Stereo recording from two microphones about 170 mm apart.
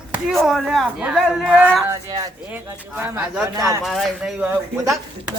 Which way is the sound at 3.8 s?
Centre (ahead or behind).